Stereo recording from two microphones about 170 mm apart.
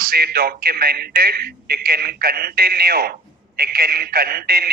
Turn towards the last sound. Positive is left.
turn(degrees=-65)  # may be behind; listen again after turning